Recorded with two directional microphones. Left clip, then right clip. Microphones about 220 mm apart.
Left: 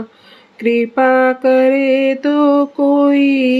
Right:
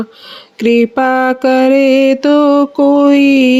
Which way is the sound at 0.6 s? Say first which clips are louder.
Right 2 dB; 45° right (ahead or behind).